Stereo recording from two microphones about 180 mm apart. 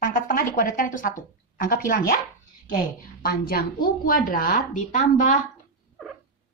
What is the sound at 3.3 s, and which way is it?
A woman's voice, 55° left (ahead or behind).